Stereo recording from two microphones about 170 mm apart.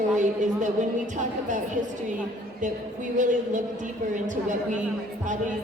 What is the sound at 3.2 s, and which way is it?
A woman's voice, 45° right (ahead or behind).